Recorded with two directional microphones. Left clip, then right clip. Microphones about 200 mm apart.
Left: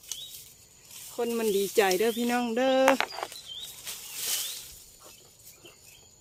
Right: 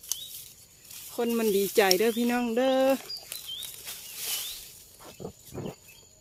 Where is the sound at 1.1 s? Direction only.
20° right (ahead or behind); by 2.9 s centre (ahead or behind).